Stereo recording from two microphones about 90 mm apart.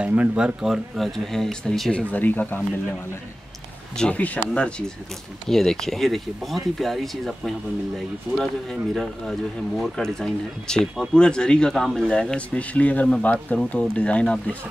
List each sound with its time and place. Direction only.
0.0 s speech: 15° right (ahead or behind); by 2.6 s 20° left (ahead or behind)
3.9 s speech: 10° left (ahead or behind)